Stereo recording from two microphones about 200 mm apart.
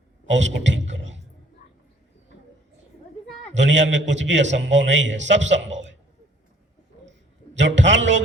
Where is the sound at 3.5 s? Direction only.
65° right (ahead or behind).